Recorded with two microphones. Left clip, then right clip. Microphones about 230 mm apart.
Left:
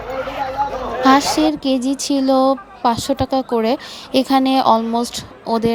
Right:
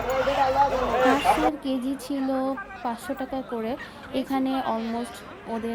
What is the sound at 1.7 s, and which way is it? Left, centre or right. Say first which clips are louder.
Speech: left 10 dB; left.